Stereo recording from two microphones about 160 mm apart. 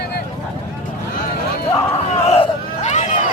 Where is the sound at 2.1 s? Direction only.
40° left (ahead or behind).